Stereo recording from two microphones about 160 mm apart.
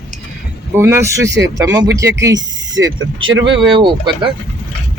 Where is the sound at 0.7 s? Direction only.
15° right (ahead or behind).